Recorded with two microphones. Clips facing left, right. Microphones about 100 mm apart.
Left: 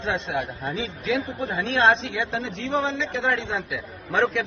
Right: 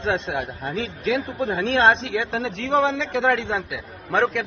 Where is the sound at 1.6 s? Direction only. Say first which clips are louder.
Right 2 dB; 60° right (ahead or behind).